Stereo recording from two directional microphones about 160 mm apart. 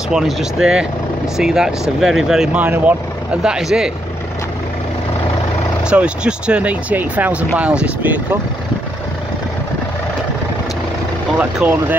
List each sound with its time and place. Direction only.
0.1 s speech: 5° right (ahead or behind)
5.9 s speech: 5° right (ahead or behind)
11.3 s speech: 10° right (ahead or behind)